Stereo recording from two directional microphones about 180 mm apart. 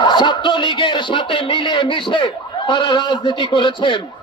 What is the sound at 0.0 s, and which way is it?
Speech, 25° left (ahead or behind).